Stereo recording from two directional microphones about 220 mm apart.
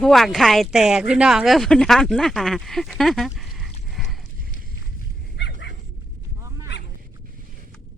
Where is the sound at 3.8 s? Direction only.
Centre (ahead or behind).